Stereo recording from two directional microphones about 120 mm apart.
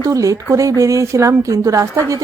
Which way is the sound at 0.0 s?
30° right (ahead or behind).